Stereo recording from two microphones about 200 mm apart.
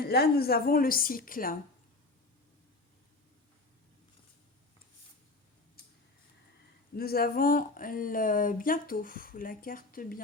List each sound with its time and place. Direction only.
0.0 s speech: 50° left (ahead or behind)
6.9 s speech: 50° left (ahead or behind)